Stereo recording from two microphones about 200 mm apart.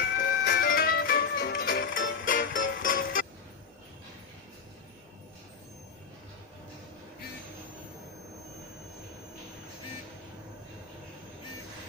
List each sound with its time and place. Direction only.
0.2 s music: 45° left (ahead or behind)